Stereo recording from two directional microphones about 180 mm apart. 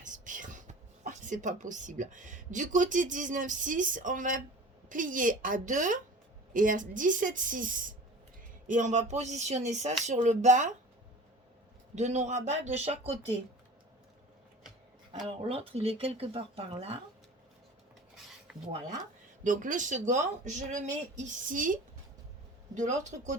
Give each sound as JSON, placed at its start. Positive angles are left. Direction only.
{"t": 0.0, "sound": "a woman's voice", "side_deg": -45}
{"t": 11.9, "sound": "speech", "side_deg": -40}
{"t": 15.4, "sound": "speech", "side_deg": -30}
{"t": 19.5, "sound": "a woman's voice", "side_deg": -45}